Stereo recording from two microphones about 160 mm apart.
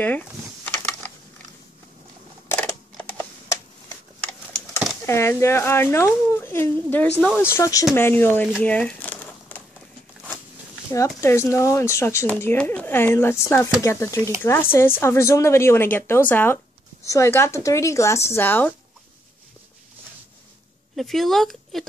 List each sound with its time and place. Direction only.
0.0 s speech: 10° left (ahead or behind)
0.7 s typing: 10° left (ahead or behind)
2.4 s camera: 15° left (ahead or behind)
2.7 s typing: 10° left (ahead or behind)
5.0 s speech: 15° left (ahead or behind)
8.6 s a sound: 10° left (ahead or behind)
11.1 s speech: 15° left (ahead or behind)
20.9 s speech: centre (ahead or behind)